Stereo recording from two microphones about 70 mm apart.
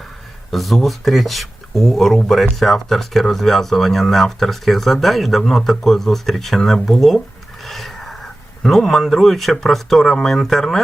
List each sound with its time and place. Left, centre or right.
0.5 s speech: centre